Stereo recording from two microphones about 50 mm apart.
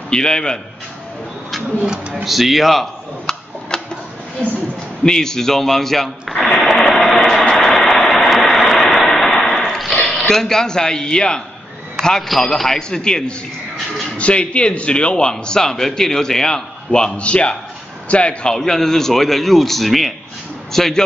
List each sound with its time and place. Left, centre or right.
0.1 s a man's voice: centre
2.2 s a man's voice: centre
3.3 s a sound: centre
5.0 s a man's voice: centre
6.6 s a sound: centre
7.5 s vehicle: centre
10.0 s a man's voice: centre
18.5 s a man's voice: centre